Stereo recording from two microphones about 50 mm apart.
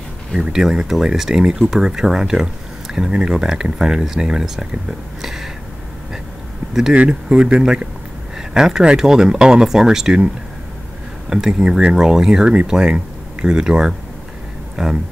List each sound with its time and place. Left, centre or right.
0.4 s speech: centre
5.2 s a sound: centre
6.9 s speech: right